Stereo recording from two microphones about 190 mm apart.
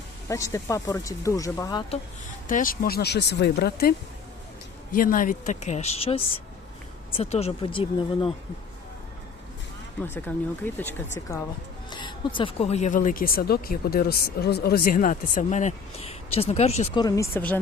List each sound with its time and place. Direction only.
0.3 s speech: 15° left (ahead or behind)
2.5 s speech: 45° left (ahead or behind)
4.9 s a woman's voice: 45° left (ahead or behind); by 8.3 s 30° left (ahead or behind)
10.0 s speech: 10° left (ahead or behind)
11.9 s speech: 25° left (ahead or behind)
17.0 s speech: 15° left (ahead or behind)